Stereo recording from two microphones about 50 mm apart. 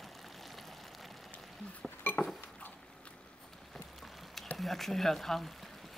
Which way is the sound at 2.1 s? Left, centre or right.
Left.